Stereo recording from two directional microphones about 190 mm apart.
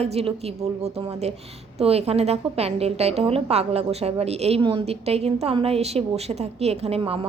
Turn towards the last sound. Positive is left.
turn(degrees=-30)  # may be behind; listen again after turning